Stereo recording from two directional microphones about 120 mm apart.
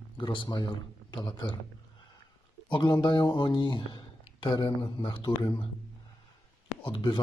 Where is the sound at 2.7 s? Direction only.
40° left (ahead or behind).